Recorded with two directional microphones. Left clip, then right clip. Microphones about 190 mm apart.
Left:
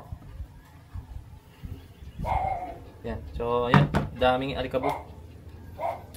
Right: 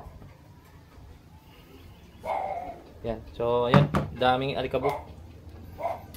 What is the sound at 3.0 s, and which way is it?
Speech, 35° right (ahead or behind).